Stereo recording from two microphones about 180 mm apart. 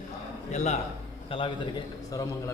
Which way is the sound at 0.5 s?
40° left (ahead or behind).